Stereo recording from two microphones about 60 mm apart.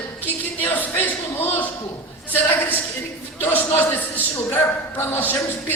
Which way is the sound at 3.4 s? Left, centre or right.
Left.